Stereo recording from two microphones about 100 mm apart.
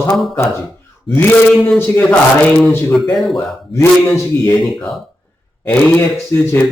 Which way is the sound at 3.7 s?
25° left (ahead or behind).